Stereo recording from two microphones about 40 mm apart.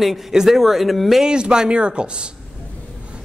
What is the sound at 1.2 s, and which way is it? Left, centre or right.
Speech, right.